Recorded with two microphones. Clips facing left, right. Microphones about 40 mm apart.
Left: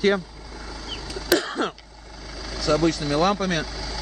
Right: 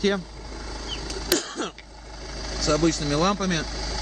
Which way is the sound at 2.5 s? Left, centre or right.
Centre.